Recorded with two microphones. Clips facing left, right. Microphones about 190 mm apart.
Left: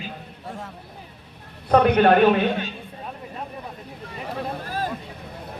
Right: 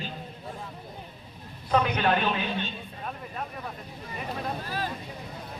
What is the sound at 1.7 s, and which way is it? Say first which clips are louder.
Speech: left 9 dB; 60° left (ahead or behind).